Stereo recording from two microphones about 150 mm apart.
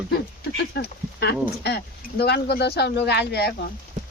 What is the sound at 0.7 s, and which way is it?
Speech, 90° left.